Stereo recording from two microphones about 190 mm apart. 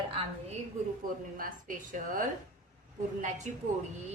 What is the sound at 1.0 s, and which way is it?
A woman's voice, 45° right (ahead or behind).